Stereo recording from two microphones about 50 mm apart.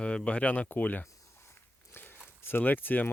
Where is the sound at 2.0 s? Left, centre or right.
Left.